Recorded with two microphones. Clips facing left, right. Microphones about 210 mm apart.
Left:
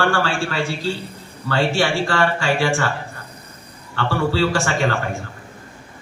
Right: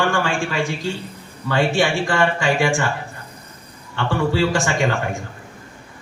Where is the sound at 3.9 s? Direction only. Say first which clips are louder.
Even; 15° right (ahead or behind).